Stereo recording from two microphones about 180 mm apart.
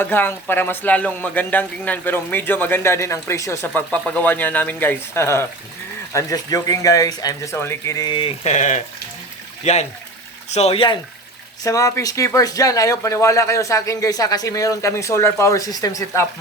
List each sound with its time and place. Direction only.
0.0 s speech: 10° left (ahead or behind)
8.4 s speech: 40° left (ahead or behind)
11.6 s speech: 20° left (ahead or behind)